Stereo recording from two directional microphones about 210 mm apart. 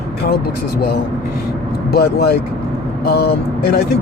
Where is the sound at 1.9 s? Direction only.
50° left (ahead or behind).